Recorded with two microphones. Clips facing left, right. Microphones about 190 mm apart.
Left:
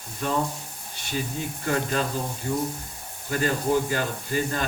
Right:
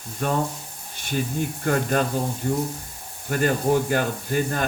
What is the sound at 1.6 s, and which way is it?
Speech, 55° right (ahead or behind).